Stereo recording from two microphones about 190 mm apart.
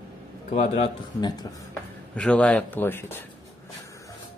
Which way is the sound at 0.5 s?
35° left (ahead or behind).